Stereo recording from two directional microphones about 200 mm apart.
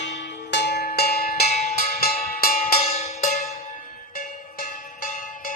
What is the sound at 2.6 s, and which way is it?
Cowbell, 30° left (ahead or behind).